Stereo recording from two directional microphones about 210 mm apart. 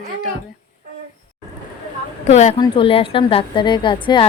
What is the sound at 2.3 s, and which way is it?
A woman's voice, 30° left (ahead or behind).